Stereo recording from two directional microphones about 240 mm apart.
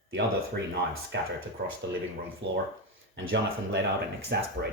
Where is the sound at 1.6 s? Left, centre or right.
Right.